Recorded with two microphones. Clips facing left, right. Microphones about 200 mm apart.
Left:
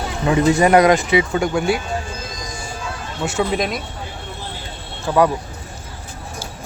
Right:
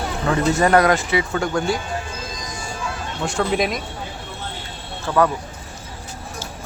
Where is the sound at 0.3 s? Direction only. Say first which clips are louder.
Left 3 dB; 15° left (ahead or behind).